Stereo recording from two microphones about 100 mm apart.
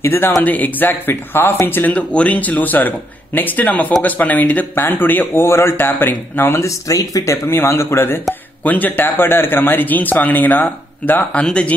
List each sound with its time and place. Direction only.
0.0 s speech: 20° left (ahead or behind)
7.4 s speech: 25° left (ahead or behind)